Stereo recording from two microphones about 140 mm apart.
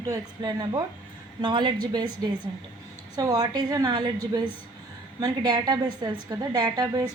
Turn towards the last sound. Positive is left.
turn(degrees=-25)  # may be behind; listen again after turning